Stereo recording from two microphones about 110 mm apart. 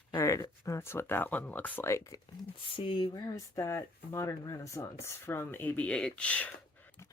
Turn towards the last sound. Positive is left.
turn(degrees=10)  # may be behind; listen again after turning